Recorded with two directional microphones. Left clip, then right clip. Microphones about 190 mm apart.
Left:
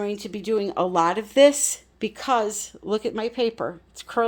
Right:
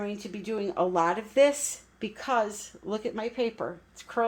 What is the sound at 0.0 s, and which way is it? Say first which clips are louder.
Speech: left 7 dB; 60° left (ahead or behind).